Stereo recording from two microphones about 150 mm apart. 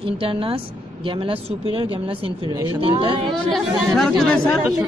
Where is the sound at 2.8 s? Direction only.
35° right (ahead or behind).